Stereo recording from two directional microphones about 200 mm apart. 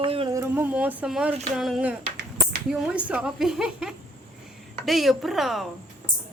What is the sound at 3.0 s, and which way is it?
Speech, 5° right (ahead or behind).